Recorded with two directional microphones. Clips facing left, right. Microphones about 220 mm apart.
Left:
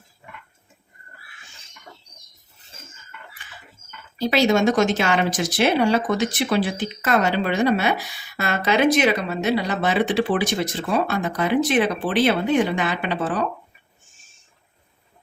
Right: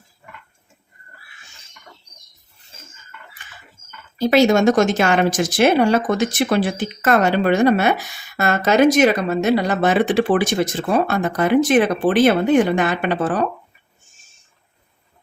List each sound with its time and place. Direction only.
4.2 s speech: 50° right (ahead or behind)